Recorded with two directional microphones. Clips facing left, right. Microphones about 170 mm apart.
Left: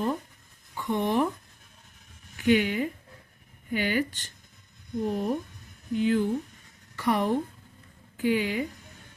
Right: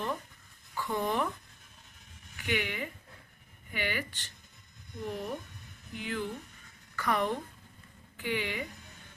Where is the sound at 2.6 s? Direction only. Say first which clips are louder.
Left 9 dB; 40° left (ahead or behind).